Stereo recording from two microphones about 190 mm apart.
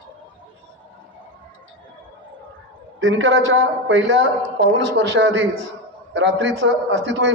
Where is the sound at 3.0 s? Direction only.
90° right.